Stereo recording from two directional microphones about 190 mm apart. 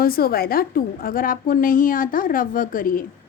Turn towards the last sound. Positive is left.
turn(degrees=45)  # may be behind; listen again after turning